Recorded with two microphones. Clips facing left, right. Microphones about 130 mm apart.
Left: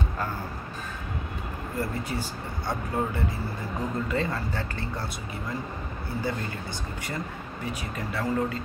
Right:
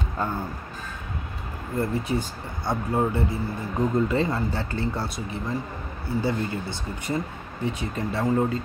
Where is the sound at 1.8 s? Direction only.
25° right (ahead or behind).